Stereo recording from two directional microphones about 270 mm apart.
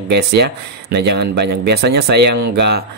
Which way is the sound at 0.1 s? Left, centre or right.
Right.